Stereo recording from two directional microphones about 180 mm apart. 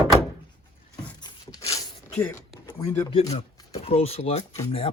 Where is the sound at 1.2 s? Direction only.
20° left (ahead or behind).